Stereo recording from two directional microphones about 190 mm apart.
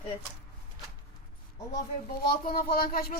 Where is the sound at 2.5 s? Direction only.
50° left (ahead or behind).